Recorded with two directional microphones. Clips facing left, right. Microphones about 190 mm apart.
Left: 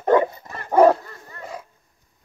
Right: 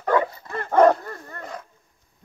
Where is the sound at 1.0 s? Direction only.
50° right (ahead or behind).